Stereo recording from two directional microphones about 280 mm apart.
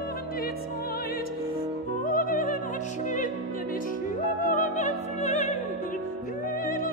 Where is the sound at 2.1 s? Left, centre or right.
Left.